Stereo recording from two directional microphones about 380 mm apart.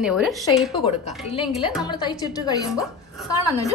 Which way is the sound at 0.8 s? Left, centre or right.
Centre.